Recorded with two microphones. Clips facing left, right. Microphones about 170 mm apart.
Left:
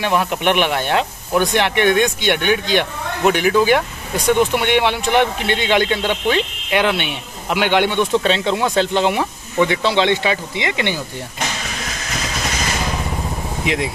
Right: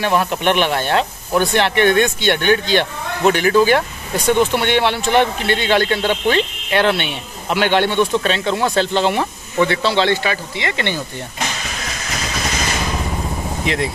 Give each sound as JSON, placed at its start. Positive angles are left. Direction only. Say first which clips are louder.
{"t": 0.0, "sound": "speech", "louder": "right 1 dB", "side_deg": 15}
{"t": 13.7, "sound": "speech", "louder": "left 1 dB", "side_deg": 10}